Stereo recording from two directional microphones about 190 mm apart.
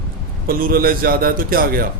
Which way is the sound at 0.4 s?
50° right (ahead or behind).